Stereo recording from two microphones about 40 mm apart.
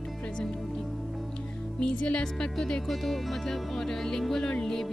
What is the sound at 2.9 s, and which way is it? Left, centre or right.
Speech, centre.